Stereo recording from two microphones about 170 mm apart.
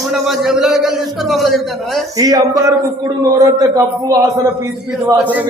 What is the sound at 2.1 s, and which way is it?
A man's voice, 20° right (ahead or behind).